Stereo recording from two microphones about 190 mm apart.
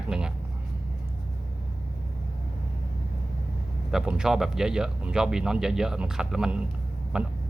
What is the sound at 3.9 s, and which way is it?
A man's voice, 5° right (ahead or behind).